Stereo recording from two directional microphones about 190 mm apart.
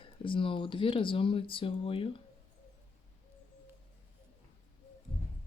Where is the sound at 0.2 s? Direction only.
25° left (ahead or behind).